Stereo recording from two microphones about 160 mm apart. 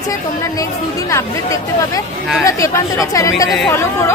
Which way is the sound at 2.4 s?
20° left (ahead or behind).